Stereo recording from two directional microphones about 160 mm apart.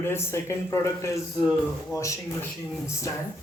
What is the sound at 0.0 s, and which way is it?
Speech, 15° left (ahead or behind).